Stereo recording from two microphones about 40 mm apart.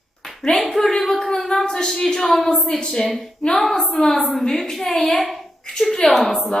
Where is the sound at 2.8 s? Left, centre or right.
Left.